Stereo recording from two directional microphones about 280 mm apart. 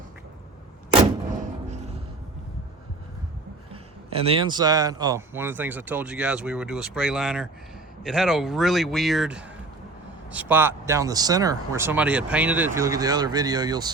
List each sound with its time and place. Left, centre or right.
1.4 s music: right
4.1 s speech: centre